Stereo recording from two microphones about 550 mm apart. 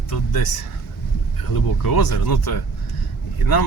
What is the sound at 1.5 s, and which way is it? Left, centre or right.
Speech, left.